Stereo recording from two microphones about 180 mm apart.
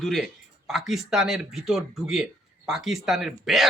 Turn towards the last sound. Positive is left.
turn(degrees=0)  # may be behind; listen again after turning